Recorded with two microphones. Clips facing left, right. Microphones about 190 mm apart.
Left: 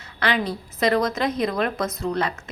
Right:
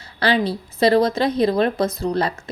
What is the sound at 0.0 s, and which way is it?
A woman's voice, 30° right (ahead or behind).